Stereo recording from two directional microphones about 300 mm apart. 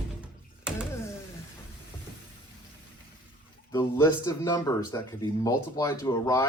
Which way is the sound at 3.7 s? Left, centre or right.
Centre.